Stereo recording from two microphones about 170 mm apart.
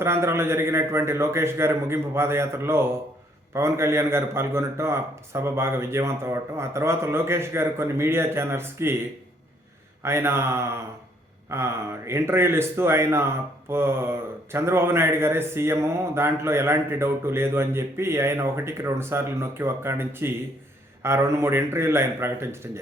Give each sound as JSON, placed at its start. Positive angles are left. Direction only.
{"t": 0.0, "sound": "a man's voice", "side_deg": -15}
{"t": 10.0, "sound": "a man's voice", "side_deg": -15}